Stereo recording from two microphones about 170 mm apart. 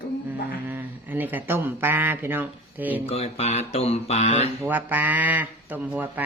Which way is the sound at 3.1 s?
35° left (ahead or behind).